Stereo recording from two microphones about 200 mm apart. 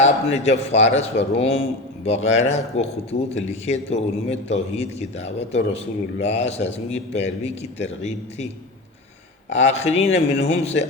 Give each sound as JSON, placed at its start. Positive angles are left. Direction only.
{"t": 0.0, "sound": "a man's voice", "side_deg": 35}
{"t": 9.6, "sound": "a man's voice", "side_deg": 35}